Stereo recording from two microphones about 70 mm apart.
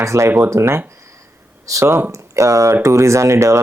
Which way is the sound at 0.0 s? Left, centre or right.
Right.